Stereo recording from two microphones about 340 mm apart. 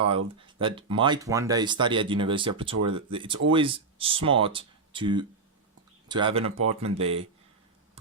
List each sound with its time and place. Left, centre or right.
0.3 s speech: centre